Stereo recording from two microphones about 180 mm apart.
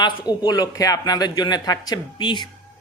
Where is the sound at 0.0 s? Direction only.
20° left (ahead or behind).